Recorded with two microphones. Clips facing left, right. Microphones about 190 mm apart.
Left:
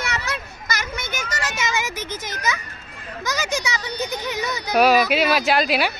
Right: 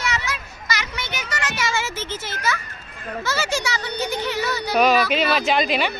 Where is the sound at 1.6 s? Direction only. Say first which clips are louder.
Even; 15° left (ahead or behind).